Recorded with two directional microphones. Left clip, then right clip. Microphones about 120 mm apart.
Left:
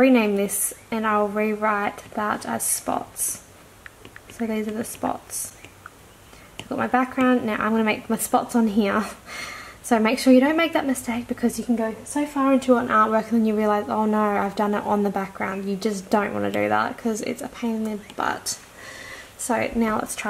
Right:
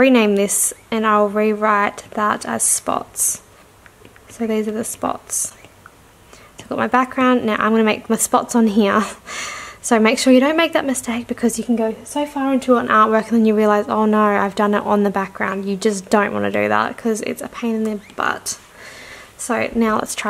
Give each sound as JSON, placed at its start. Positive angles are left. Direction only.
{"t": 0.0, "sound": "speech", "side_deg": -45}
{"t": 4.4, "sound": "speech", "side_deg": -40}
{"t": 6.7, "sound": "speech", "side_deg": -45}